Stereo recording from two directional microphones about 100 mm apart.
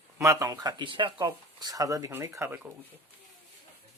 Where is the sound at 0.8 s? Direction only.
55° right (ahead or behind).